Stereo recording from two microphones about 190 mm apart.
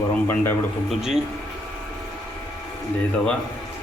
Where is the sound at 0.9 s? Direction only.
Centre (ahead or behind).